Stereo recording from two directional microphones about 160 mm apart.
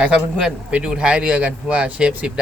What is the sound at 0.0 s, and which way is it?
A man's voice, 5° right (ahead or behind).